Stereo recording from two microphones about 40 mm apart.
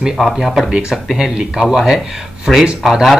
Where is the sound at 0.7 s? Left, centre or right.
Centre.